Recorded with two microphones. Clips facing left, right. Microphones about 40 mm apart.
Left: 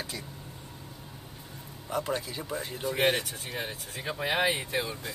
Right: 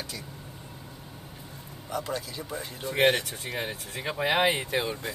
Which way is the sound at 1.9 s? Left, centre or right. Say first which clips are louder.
Left 1 dB; left.